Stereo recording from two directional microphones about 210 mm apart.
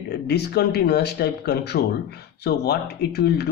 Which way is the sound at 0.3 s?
50° left (ahead or behind).